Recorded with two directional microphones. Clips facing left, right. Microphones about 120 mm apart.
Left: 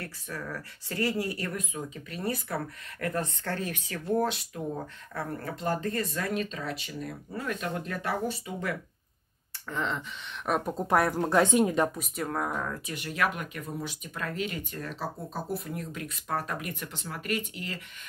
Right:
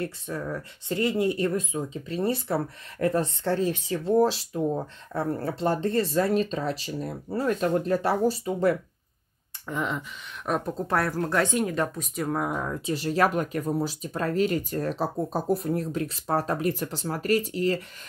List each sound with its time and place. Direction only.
0.0 s speech: 25° right (ahead or behind)
9.7 s speech: 10° right (ahead or behind)
10.6 s speech: 10° left (ahead or behind)
12.0 s speech: 5° right (ahead or behind)
12.8 s speech: 30° right (ahead or behind)